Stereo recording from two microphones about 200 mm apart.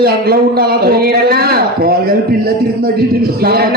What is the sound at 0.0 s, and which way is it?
A man's voice, 50° right (ahead or behind).